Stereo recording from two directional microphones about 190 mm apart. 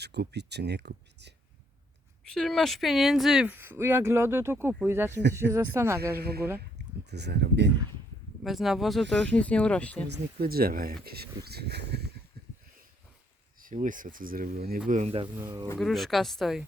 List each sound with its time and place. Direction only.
0.0 s speech: 60° right (ahead or behind)
2.2 s speech: 5° left (ahead or behind); by 6.0 s 15° right (ahead or behind)
6.1 s speech: 55° right (ahead or behind)
8.4 s speech: centre (ahead or behind)
10.4 s speech: 50° right (ahead or behind)
13.6 s speech: 45° right (ahead or behind)
14.8 s speech: 35° right (ahead or behind)
15.8 s speech: centre (ahead or behind)